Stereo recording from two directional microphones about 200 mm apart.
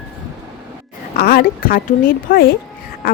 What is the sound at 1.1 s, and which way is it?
A woman's voice, 50° left (ahead or behind).